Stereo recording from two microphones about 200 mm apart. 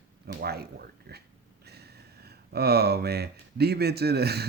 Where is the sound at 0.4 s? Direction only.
50° right (ahead or behind).